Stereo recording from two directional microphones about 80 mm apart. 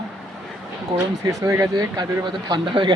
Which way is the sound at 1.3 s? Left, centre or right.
Right.